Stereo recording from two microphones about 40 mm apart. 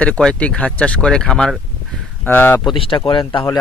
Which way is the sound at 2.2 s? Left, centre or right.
Left.